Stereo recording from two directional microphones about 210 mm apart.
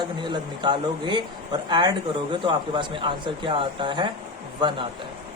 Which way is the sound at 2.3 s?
20° right (ahead or behind).